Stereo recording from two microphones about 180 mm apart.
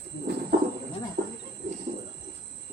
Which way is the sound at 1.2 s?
55° right (ahead or behind).